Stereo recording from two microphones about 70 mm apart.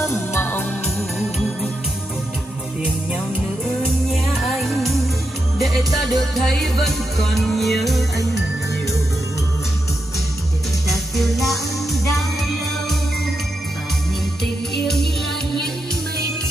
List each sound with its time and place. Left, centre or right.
0.0 s music: left
0.4 s music: left
4.1 s music: centre
10.9 s music: centre